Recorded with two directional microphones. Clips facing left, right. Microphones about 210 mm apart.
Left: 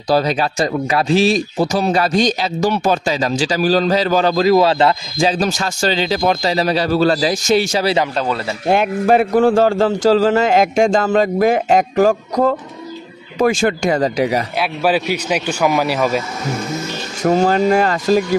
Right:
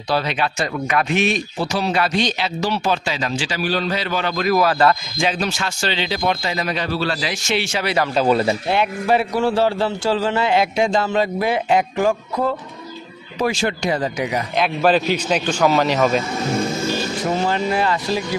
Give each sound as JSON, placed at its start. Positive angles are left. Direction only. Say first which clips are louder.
{"t": 0.1, "sound": "speech", "louder": "left 5 dB", "side_deg": 40}
{"t": 4.5, "sound": "speech", "louder": "left 1 dB", "side_deg": 25}
{"t": 8.2, "sound": "a man's voice", "louder": "right 4 dB", "side_deg": -15}
{"t": 8.6, "sound": "a man's voice", "louder": "left 5 dB", "side_deg": 45}
{"t": 14.6, "sound": "a man's voice", "louder": "right 3 dB", "side_deg": 10}
{"t": 17.2, "sound": "a man's voice", "louder": "left 10 dB", "side_deg": 45}